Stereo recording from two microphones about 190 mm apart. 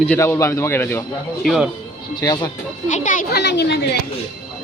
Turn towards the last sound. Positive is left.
turn(degrees=60)  # may be behind; listen again after turning